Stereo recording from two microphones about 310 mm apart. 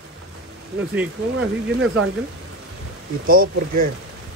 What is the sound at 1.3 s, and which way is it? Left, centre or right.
Speech, right.